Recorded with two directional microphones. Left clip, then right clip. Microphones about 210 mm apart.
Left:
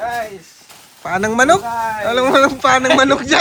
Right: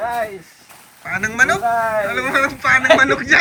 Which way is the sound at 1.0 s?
15° left (ahead or behind).